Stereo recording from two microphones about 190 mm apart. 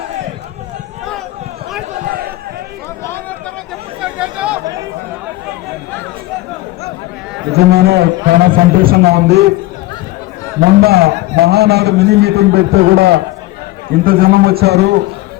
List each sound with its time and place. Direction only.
3.0 s a sound: 10° left (ahead or behind)
4.0 s chatter: 5° right (ahead or behind)
7.5 s a man's voice: 60° right (ahead or behind)
10.8 s a man's voice: 55° right (ahead or behind)